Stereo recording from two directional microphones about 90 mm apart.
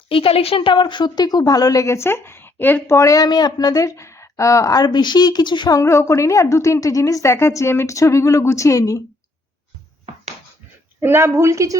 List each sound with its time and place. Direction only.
0.1 s a woman's voice: 90° left; by 4.8 s 40° left (ahead or behind)
4.8 s a woman's voice: 55° left (ahead or behind)
5.8 s a woman's voice: 30° left (ahead or behind)
11.0 s a woman's voice: 25° right (ahead or behind)